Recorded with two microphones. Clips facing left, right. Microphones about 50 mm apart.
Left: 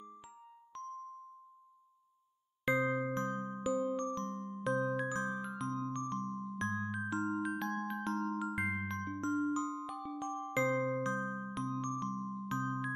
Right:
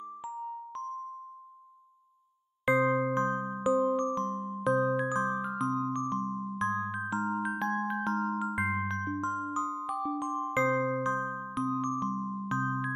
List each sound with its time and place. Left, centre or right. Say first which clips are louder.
0.2 s music: right 17 dB; centre
2.6 s music: right 7 dB; centre
4.2 s music: right 8 dB; right
5.1 s music: right 7 dB; centre
5.7 s music: right 5 dB; right
6.6 s music: right 6 dB; centre
7.2 s music: right 4 dB; right
8.5 s music: right 6 dB; centre
8.9 s music: right 7 dB; right
9.2 s music: right 2 dB; centre
9.5 s music: right 4 dB; right
11.1 s music: right 5 dB; centre